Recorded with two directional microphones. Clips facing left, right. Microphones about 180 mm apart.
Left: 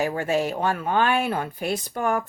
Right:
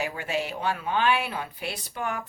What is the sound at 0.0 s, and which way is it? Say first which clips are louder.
A woman's voice: left 6 dB; 45° left (ahead or behind).